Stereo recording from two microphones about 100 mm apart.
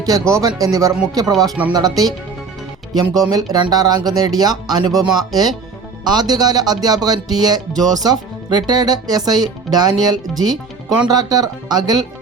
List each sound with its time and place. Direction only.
0.0 s speech: 35° right (ahead or behind)
3.2 s speech: 40° right (ahead or behind)